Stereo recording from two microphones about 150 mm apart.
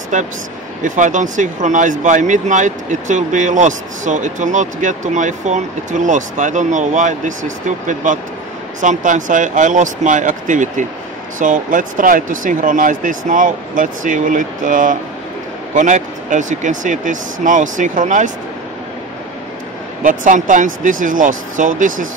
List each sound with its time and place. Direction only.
0.1 s speech: 60° right (ahead or behind)
20.0 s speech: 60° right (ahead or behind)